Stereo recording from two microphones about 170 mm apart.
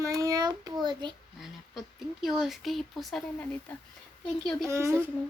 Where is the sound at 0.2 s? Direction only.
20° right (ahead or behind).